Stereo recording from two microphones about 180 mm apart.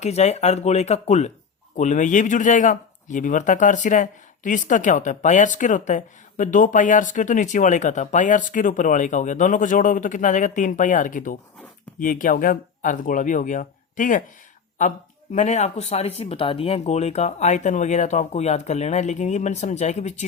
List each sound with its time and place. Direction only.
0.0 s speech: 35° left (ahead or behind)